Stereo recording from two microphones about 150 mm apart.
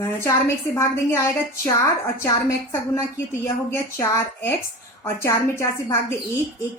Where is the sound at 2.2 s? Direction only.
20° left (ahead or behind).